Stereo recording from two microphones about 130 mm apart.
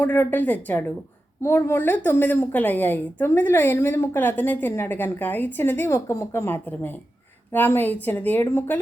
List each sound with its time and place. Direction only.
0.0 s a woman's voice: 15° left (ahead or behind)